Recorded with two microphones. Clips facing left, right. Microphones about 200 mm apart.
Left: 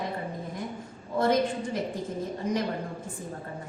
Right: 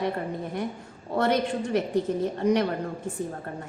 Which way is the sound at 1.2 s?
70° right (ahead or behind).